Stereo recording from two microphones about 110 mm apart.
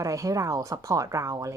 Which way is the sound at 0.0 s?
30° right (ahead or behind).